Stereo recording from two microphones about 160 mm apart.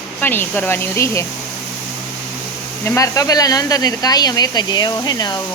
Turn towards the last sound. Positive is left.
turn(degrees=25)  # may be behind; listen again after turning